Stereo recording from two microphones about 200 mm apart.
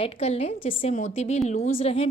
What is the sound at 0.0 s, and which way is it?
A woman's voice, 30° left (ahead or behind).